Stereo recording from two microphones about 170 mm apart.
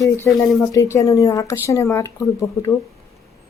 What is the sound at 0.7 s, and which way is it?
Speech, 20° left (ahead or behind).